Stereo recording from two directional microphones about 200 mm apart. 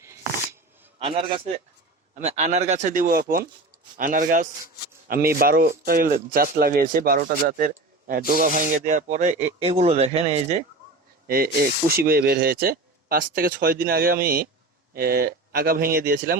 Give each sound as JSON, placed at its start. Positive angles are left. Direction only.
{"t": 0.9, "sound": "a man's voice", "side_deg": -25}
{"t": 11.3, "sound": "speech", "side_deg": -50}